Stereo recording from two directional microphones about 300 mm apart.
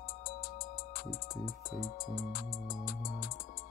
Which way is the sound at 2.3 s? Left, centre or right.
Left.